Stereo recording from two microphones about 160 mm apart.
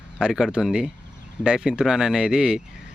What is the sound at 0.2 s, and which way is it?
Speech, 5° right (ahead or behind).